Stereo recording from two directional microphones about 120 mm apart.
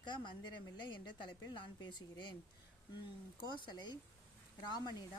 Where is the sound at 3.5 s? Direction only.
40° left (ahead or behind).